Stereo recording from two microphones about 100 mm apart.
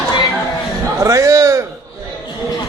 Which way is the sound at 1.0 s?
30° right (ahead or behind).